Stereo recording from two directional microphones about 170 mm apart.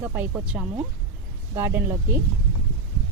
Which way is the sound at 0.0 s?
10° right (ahead or behind).